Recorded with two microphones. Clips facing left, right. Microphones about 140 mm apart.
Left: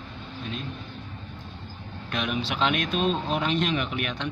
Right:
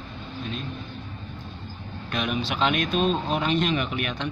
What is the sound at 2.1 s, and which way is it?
Speech, centre (ahead or behind).